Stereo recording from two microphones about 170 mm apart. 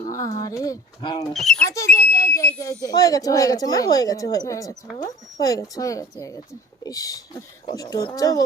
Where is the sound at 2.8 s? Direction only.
20° left (ahead or behind).